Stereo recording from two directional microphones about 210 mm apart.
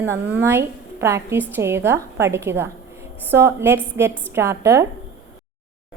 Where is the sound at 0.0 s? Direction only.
10° right (ahead or behind).